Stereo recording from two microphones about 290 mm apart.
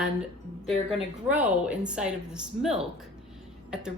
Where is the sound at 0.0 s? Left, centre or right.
Centre.